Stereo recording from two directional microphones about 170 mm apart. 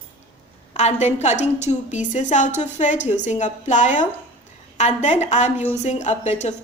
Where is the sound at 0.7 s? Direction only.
40° left (ahead or behind).